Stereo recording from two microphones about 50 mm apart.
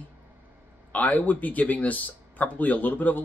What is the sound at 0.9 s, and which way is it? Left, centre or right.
A man's voice, left.